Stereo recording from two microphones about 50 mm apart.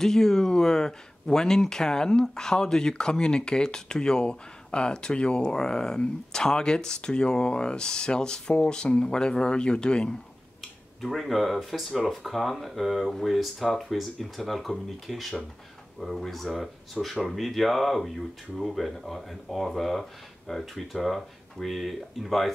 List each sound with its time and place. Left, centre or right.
0.0 s speech: centre
11.0 s speech: centre